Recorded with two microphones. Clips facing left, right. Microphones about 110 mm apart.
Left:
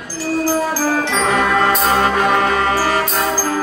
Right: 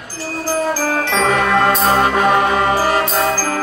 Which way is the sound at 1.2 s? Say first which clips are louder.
Right 2 dB; 5° left (ahead or behind).